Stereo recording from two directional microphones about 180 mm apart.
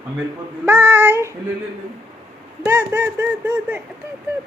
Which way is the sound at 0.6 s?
10° right (ahead or behind).